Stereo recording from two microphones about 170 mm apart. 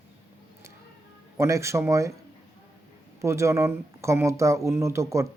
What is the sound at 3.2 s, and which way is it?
Speech, 15° right (ahead or behind).